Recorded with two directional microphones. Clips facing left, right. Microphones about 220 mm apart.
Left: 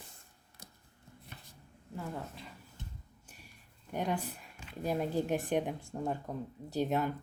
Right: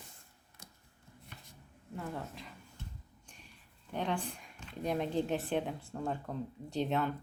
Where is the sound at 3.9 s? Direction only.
10° left (ahead or behind).